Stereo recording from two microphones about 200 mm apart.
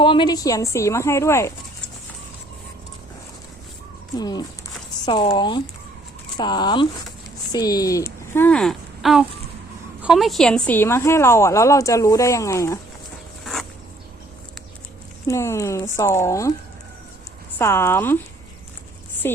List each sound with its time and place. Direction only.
0.0 s a woman's voice: 25° left (ahead or behind)
4.2 s a woman's voice: 20° left (ahead or behind)
13.4 s a sound: centre (ahead or behind)
15.3 s a woman's voice: 15° left (ahead or behind)
17.6 s a woman's voice: 10° left (ahead or behind)
19.2 s a woman's voice: 10° left (ahead or behind)